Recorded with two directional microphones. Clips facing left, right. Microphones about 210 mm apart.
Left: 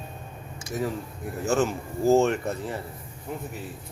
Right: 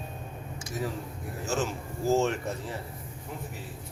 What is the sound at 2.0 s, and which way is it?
Speech, 55° left (ahead or behind).